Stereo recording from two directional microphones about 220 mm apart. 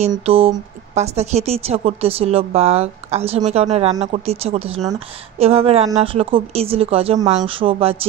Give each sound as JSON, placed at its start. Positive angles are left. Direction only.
{"t": 0.0, "sound": "a woman's voice", "side_deg": -25}